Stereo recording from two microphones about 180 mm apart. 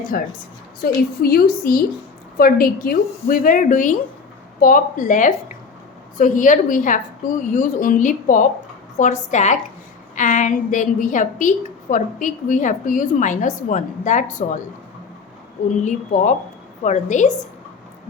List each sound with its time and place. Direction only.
0.1 s a woman's voice: 50° left (ahead or behind)
15.8 s a woman's voice: 40° left (ahead or behind)